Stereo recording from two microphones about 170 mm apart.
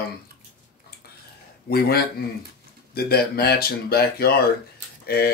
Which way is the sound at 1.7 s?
65° left (ahead or behind).